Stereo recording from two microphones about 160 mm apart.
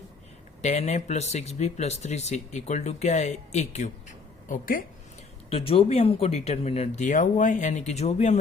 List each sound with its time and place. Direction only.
0.6 s speech: 45° left (ahead or behind)
4.4 s a woman's voice: 60° left (ahead or behind)
5.5 s speech: 40° left (ahead or behind)